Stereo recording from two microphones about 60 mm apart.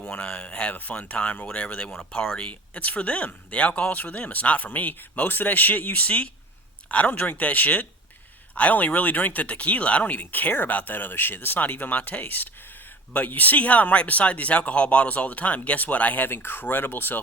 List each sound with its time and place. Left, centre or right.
0.0 s speech: left